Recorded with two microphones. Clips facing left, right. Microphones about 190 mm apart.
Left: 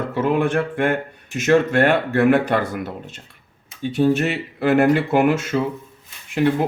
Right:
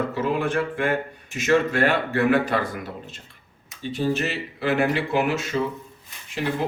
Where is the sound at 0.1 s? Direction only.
55° left (ahead or behind).